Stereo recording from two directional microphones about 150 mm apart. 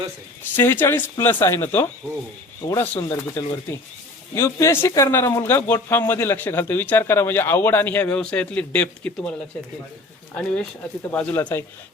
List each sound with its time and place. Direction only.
0.5 s speech: 15° left (ahead or behind)
10.3 s speech: 10° left (ahead or behind)